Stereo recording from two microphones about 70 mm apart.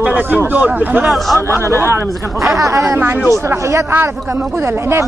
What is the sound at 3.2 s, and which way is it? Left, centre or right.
Speech, right.